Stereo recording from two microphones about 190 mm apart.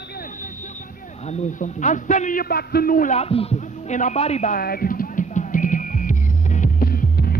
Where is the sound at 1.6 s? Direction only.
40° left (ahead or behind).